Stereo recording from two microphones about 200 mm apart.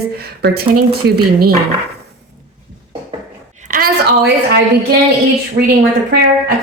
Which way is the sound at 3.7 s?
45° right (ahead or behind).